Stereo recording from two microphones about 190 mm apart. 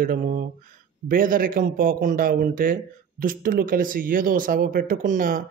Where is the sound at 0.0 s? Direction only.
45° right (ahead or behind).